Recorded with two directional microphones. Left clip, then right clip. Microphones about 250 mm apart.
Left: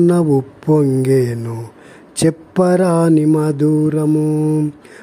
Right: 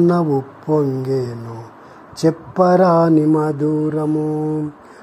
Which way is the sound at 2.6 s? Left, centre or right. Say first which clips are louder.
Right 2 dB; left.